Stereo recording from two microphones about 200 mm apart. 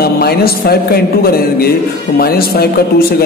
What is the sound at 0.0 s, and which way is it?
Speech, 50° left (ahead or behind).